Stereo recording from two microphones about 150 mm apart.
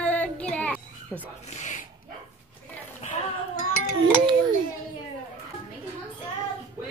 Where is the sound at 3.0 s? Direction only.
45° left (ahead or behind).